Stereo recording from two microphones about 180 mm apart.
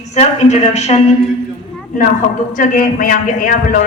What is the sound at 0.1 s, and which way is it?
Speech, 40° left (ahead or behind).